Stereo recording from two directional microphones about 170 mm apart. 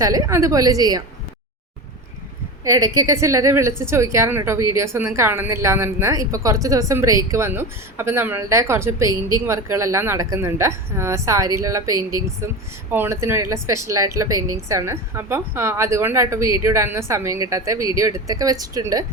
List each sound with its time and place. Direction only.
0.0 s a woman's voice: 20° right (ahead or behind)
2.6 s a woman's voice: 20° right (ahead or behind)